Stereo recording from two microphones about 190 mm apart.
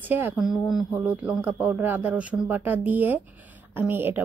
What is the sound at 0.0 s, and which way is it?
Speech, 10° right (ahead or behind).